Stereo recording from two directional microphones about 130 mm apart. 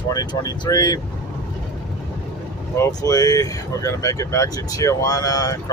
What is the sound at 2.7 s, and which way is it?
Speech, 25° left (ahead or behind).